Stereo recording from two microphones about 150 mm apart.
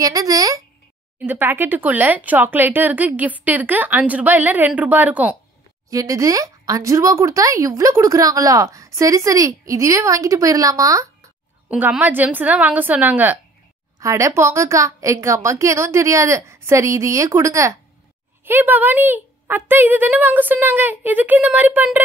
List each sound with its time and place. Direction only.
0.0 s speech: 25° right (ahead or behind)
5.9 s speech: 20° right (ahead or behind)
11.7 s speech: 10° right (ahead or behind)